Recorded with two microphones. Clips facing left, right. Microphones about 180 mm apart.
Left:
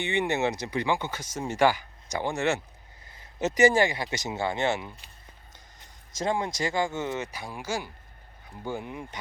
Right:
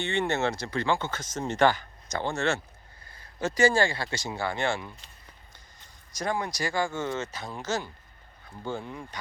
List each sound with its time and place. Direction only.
0.0 s speech: 15° left (ahead or behind)
6.1 s speech: 25° left (ahead or behind)